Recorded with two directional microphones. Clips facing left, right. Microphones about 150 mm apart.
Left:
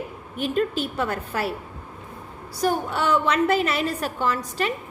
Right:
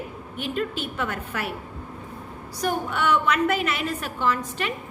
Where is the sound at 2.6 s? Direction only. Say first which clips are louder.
Left 2 dB; 30° left (ahead or behind).